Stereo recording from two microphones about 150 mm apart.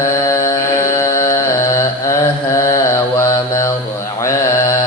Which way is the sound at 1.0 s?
20° left (ahead or behind).